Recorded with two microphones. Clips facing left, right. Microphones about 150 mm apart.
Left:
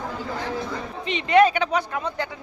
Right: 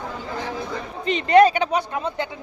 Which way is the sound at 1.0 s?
40° right (ahead or behind).